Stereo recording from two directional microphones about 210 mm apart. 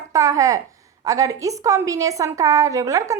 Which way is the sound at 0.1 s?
15° right (ahead or behind).